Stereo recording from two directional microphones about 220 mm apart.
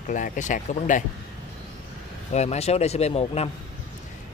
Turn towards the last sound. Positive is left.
turn(degrees=30)  # may be behind; listen again after turning